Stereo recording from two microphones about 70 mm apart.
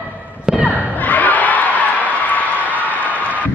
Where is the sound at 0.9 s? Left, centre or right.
Left.